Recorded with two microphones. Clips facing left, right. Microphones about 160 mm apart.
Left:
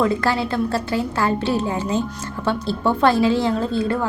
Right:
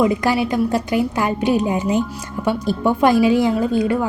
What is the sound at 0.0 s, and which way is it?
A woman's voice, 15° right (ahead or behind).